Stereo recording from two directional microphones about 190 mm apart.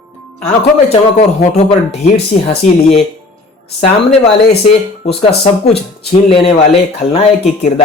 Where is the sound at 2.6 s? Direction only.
35° left (ahead or behind).